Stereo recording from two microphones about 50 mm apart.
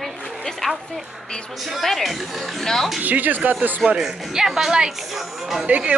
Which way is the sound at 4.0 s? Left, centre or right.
Centre.